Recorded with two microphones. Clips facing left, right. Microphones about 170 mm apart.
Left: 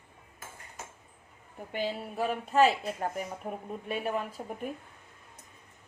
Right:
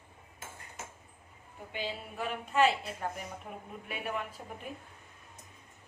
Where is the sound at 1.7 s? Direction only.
40° left (ahead or behind).